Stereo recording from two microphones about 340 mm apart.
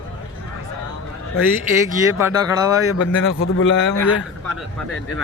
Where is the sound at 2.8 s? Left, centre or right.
Left.